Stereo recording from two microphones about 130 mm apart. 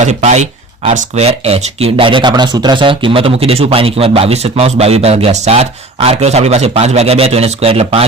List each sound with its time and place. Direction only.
0.0 s speech: 65° right (ahead or behind); by 8.0 s 45° right (ahead or behind)